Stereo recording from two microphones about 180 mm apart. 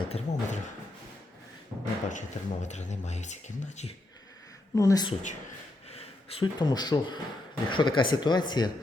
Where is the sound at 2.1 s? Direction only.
40° left (ahead or behind).